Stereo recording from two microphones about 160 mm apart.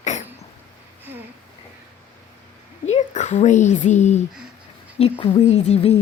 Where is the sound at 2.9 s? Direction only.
45° left (ahead or behind).